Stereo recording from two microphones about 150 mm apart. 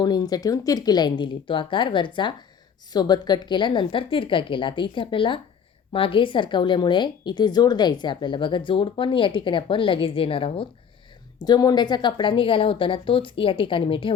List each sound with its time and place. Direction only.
0.0 s speech: 25° left (ahead or behind)
11.4 s speech: 25° left (ahead or behind)